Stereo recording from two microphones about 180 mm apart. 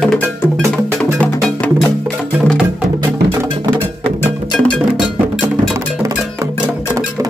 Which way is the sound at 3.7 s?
10° left (ahead or behind).